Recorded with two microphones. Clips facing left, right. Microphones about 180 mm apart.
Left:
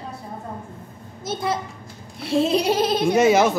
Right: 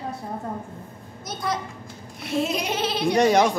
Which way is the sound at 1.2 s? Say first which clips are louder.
Left 4 dB; 25° left (ahead or behind).